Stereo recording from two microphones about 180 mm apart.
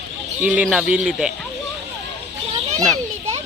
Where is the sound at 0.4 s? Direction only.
5° right (ahead or behind).